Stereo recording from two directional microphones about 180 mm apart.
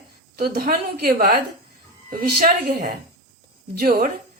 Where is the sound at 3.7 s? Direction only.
60° right (ahead or behind).